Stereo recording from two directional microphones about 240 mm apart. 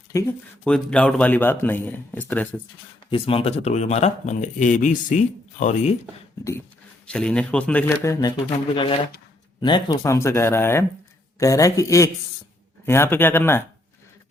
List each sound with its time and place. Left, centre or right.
0.1 s speech: centre
3.1 s speech: left
7.1 s speech: centre